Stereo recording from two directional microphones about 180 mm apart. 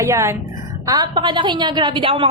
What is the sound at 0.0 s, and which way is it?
A woman's voice, 15° right (ahead or behind).